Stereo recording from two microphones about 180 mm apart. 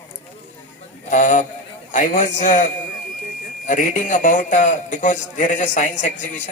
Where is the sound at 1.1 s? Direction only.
40° left (ahead or behind).